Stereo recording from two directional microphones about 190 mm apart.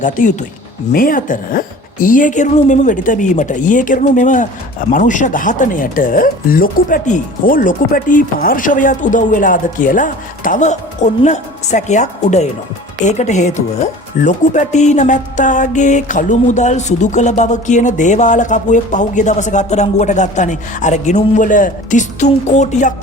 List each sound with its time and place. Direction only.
0.0 s speech: 40° left (ahead or behind)